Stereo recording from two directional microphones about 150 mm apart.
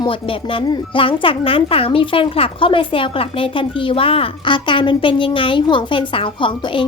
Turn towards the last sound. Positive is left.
turn(degrees=35)  # may be behind; listen again after turning